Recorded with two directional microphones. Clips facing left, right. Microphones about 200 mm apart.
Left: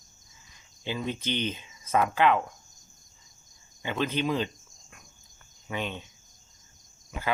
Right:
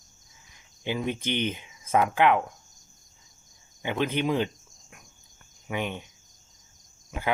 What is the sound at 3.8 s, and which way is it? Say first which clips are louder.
Cricket: right 2 dB; 15° right (ahead or behind).